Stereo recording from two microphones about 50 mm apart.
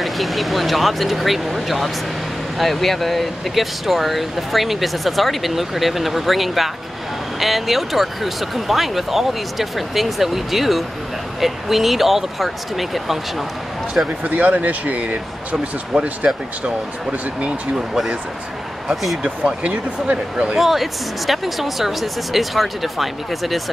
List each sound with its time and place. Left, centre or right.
0.0 s speech: centre
14.2 s speech: right
17.4 s speech: centre
19.2 s speech: right
20.5 s speech: centre